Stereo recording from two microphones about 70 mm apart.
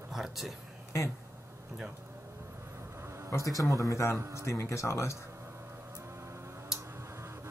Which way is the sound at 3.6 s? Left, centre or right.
Left.